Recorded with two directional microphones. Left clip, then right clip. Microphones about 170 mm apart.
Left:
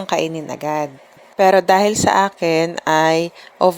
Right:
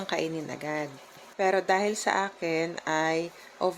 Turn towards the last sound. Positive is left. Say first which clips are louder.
# left 14 dB
turn(degrees=50)  # may be behind; listen again after turning